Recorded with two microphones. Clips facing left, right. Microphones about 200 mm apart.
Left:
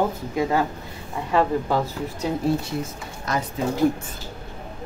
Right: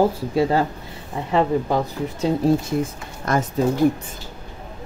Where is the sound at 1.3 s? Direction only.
20° right (ahead or behind).